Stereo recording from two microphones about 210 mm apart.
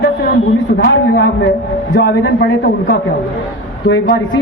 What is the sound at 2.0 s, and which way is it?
Speech, 55° left (ahead or behind).